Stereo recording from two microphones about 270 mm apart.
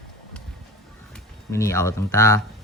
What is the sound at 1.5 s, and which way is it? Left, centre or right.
Speech, centre.